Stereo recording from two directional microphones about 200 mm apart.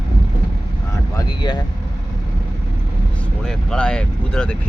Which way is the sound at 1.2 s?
20° left (ahead or behind).